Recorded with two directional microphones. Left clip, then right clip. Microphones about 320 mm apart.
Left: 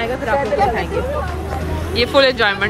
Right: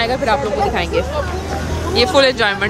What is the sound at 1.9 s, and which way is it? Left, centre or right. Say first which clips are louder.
Speech: right 1 dB; centre.